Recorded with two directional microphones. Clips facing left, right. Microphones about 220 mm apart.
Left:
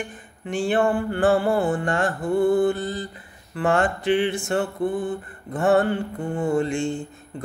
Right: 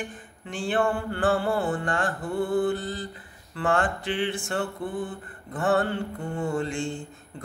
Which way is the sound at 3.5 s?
20° left (ahead or behind).